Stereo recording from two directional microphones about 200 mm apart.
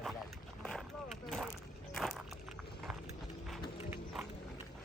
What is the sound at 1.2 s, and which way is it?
Speech, centre (ahead or behind).